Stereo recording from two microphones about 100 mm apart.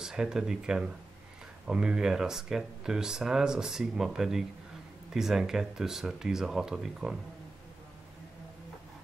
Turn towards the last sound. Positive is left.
turn(degrees=-5)  # may be behind; listen again after turning